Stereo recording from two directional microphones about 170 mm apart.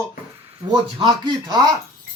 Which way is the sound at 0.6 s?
25° right (ahead or behind).